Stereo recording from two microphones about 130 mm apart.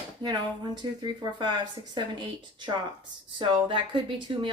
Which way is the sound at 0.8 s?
35° right (ahead or behind).